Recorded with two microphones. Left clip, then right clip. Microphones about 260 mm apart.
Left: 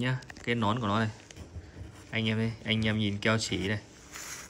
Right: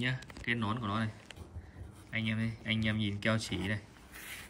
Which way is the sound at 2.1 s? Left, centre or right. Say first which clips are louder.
Left 5 dB; centre.